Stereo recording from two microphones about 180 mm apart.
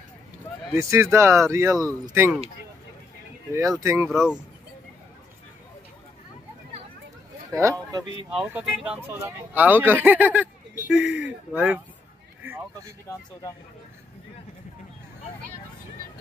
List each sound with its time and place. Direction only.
0.7 s speech: 15° right (ahead or behind)
3.5 s speech: 20° right (ahead or behind)
4.1 s speech: centre (ahead or behind)
8.3 s speech: 5° right (ahead or behind)